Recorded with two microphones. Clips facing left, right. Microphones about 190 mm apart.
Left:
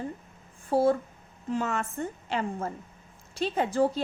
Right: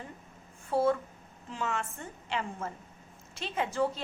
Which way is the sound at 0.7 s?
35° left (ahead or behind).